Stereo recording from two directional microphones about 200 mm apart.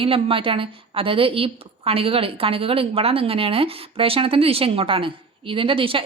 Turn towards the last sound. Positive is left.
turn(degrees=-25)  # may be behind; listen again after turning